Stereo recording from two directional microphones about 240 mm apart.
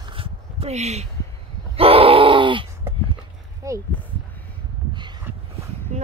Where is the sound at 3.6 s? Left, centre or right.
Centre.